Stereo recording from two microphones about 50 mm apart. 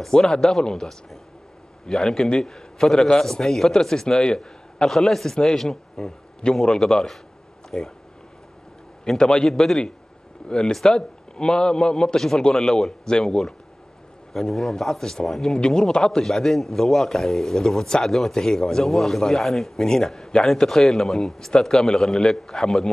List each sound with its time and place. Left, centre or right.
0.0 s a man's voice: centre
9.0 s a man's voice: centre